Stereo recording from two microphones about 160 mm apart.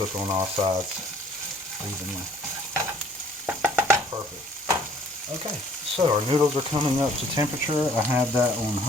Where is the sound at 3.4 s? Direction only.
10° right (ahead or behind).